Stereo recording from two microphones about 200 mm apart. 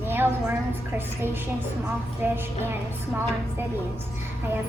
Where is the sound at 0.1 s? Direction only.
10° right (ahead or behind).